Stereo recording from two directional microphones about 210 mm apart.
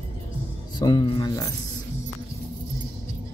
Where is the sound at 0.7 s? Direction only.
20° left (ahead or behind).